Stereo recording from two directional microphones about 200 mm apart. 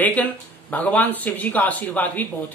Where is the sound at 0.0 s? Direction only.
10° left (ahead or behind).